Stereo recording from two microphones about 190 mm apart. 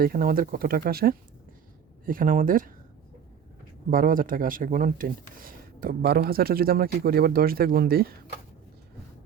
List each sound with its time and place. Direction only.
0.0 s speech: 50° right (ahead or behind)
3.8 s speech: 45° right (ahead or behind)